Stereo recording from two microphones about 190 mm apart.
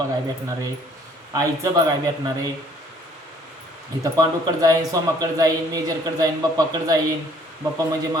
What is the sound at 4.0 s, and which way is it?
A man's voice, 20° right (ahead or behind).